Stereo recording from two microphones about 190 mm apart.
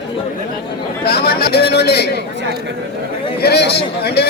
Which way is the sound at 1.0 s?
55° left (ahead or behind).